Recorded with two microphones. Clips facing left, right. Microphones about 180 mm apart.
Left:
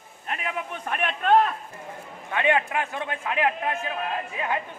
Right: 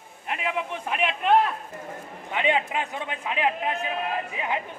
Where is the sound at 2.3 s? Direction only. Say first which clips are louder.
Left 1 dB; 20° right (ahead or behind).